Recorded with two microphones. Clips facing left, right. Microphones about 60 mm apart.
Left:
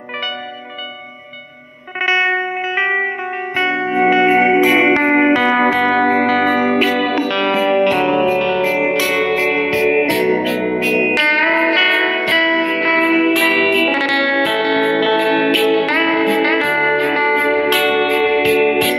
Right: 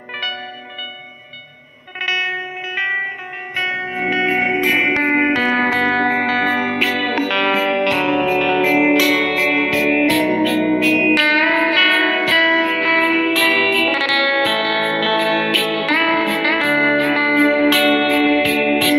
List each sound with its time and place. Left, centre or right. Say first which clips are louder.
2.0 s music: left 6 dB; left
4.5 s music: left 5 dB; centre
8.5 s music: right 1 dB; centre
9.0 s music: even; centre
9.6 s music: left 1 dB; centre